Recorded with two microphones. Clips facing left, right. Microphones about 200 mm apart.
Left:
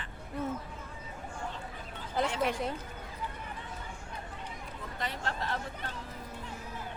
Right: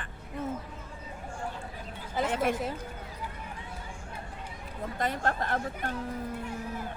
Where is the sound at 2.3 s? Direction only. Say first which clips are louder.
Right 5 dB; 50° right (ahead or behind).